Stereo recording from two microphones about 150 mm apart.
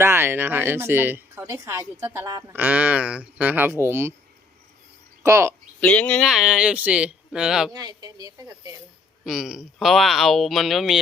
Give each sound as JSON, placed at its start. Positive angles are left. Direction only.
{"t": 0.0, "sound": "a woman's voice", "side_deg": -15}
{"t": 5.2, "sound": "a woman's voice", "side_deg": -20}
{"t": 5.8, "sound": "speech", "side_deg": 10}
{"t": 7.7, "sound": "speech", "side_deg": -25}
{"t": 9.2, "sound": "speech", "side_deg": -5}